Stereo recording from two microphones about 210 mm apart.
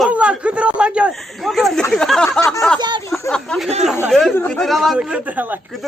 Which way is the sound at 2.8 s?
20° right (ahead or behind).